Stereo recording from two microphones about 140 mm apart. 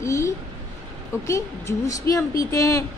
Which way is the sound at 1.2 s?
20° left (ahead or behind).